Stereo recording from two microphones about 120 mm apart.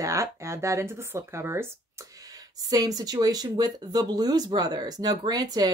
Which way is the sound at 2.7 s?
30° right (ahead or behind).